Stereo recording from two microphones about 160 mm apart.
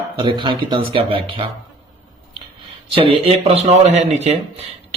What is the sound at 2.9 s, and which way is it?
A man's voice, 35° right (ahead or behind).